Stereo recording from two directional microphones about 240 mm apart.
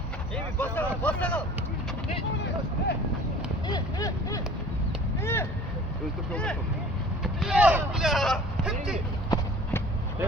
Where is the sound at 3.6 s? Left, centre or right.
Centre.